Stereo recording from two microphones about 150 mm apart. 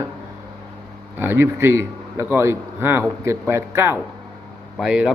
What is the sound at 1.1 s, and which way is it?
A man's voice, 15° right (ahead or behind).